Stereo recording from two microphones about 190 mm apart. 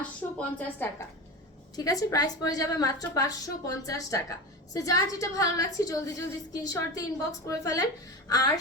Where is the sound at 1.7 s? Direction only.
20° left (ahead or behind).